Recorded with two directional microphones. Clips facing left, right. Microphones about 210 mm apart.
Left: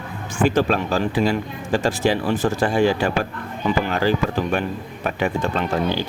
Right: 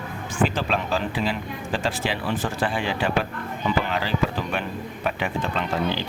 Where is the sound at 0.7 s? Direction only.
45° left (ahead or behind).